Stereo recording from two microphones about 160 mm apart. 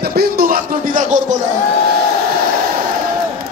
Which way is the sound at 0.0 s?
75° right (ahead or behind).